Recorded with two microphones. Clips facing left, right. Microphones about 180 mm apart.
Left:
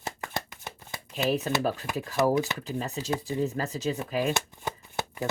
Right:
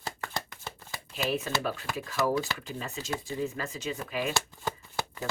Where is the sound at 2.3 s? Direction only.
20° left (ahead or behind).